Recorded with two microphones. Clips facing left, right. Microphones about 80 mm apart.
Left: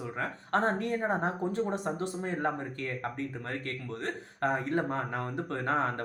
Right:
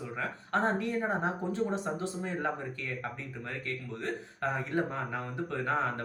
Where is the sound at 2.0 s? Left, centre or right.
Left.